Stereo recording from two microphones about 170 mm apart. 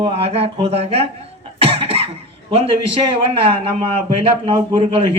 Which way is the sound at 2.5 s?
35° right (ahead or behind).